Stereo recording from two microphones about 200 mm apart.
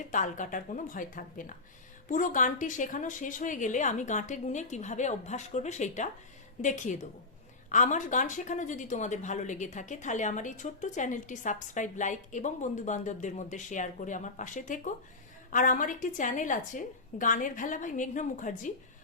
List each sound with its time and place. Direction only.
0.0 s speech: 40° left (ahead or behind)